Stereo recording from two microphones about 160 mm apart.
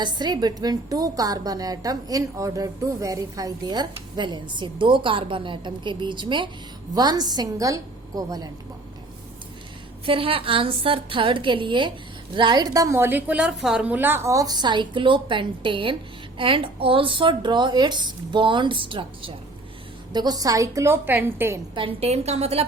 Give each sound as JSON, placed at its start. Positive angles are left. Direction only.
{"t": 0.0, "sound": "a woman's voice", "side_deg": -25}
{"t": 10.1, "sound": "a woman's voice", "side_deg": -35}
{"t": 21.8, "sound": "speech", "side_deg": -35}